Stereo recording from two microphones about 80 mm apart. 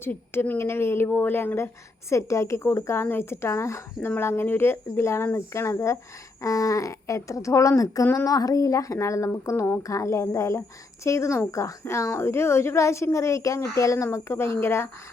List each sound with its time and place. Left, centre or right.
0.0 s a woman's voice: left